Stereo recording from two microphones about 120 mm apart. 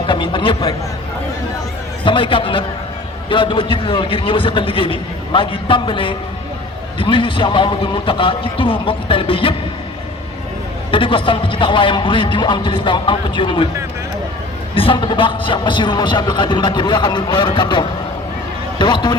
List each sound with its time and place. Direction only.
0.1 s a sound: 40° left (ahead or behind)
2.0 s a man's voice: 45° left (ahead or behind)
10.9 s speech: 45° left (ahead or behind)
14.8 s speech: 45° left (ahead or behind)